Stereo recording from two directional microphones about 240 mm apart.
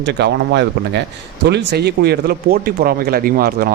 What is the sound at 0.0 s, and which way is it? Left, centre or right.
A man's voice, right.